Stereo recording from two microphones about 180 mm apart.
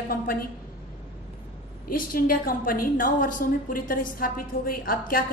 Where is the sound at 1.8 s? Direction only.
55° left (ahead or behind).